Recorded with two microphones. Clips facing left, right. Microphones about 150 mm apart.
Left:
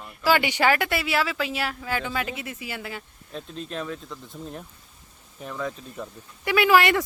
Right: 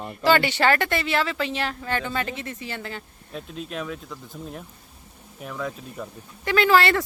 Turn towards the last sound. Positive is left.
turn(degrees=15)  # may be behind; listen again after turning